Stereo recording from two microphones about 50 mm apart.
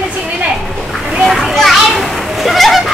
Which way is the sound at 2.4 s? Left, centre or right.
Centre.